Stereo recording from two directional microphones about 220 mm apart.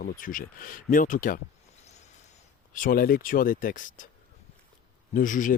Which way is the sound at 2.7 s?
40° left (ahead or behind).